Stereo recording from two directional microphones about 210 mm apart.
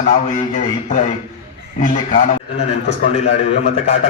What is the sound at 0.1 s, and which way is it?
A man's voice, 35° left (ahead or behind).